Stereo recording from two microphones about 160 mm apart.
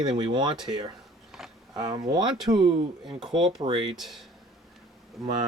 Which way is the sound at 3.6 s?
30° right (ahead or behind).